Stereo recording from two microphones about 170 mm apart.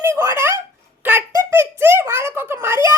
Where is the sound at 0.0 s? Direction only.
15° right (ahead or behind).